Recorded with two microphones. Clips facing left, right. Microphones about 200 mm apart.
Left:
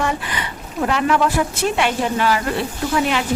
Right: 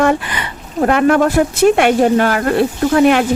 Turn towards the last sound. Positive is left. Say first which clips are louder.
# right 9 dB
turn(degrees=-55)  # may be behind; listen again after turning